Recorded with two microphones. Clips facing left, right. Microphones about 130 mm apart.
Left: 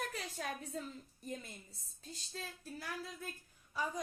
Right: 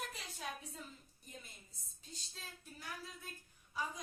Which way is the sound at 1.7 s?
35° left (ahead or behind).